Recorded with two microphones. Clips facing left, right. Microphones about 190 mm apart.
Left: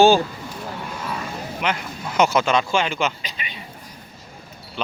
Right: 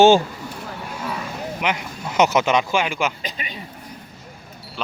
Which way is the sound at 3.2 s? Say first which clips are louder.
Right 4 dB; 40° right (ahead or behind).